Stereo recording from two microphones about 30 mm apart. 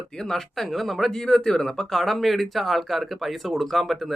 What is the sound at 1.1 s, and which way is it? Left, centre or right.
Speech, left.